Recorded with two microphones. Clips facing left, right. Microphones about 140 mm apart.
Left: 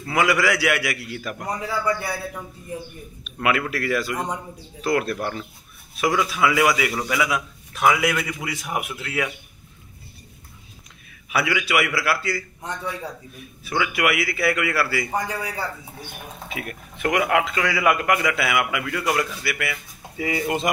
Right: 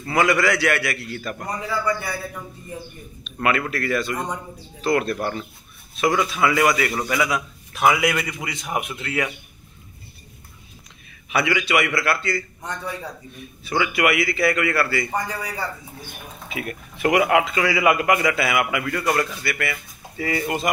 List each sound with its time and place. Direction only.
0.0 s a man's voice: 5° left (ahead or behind)
3.3 s a man's voice: centre (ahead or behind)
11.3 s a man's voice: 5° left (ahead or behind)